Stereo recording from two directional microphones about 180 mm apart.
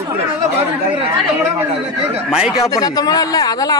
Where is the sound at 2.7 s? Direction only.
20° left (ahead or behind).